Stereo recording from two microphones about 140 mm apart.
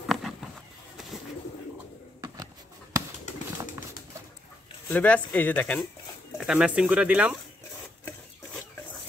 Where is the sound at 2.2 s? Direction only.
25° right (ahead or behind).